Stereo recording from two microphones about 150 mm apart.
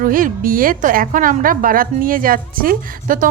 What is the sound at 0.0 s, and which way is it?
A woman's voice, 70° right (ahead or behind).